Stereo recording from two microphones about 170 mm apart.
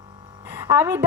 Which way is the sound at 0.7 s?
20° right (ahead or behind).